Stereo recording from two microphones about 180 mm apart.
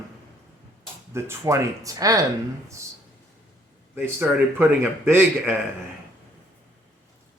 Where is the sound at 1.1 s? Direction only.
15° right (ahead or behind).